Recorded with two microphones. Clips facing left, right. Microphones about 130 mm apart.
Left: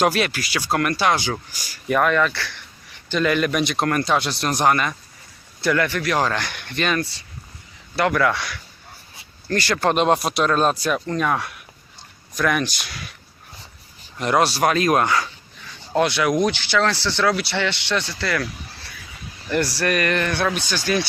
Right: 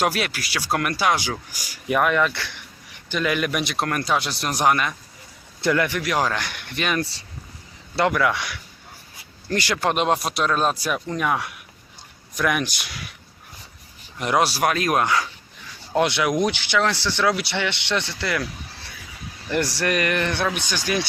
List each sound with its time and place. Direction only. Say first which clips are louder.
0.0 s speech: left 3 dB; 5° right (ahead or behind)
5.5 s speech: left 1 dB; 20° right (ahead or behind)
7.0 s speech: even; 35° right (ahead or behind)
8.1 s speech: left 2 dB; 10° right (ahead or behind)
14.2 s speech: left 2 dB; 10° right (ahead or behind)
16.0 s speech: left 1 dB; 20° right (ahead or behind)
19.5 s speech: left 1 dB; 20° right (ahead or behind)